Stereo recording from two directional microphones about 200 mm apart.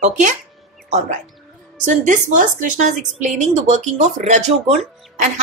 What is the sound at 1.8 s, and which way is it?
A woman's voice, 40° right (ahead or behind).